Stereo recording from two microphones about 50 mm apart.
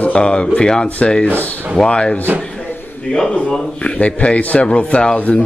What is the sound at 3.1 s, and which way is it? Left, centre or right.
Speech, left.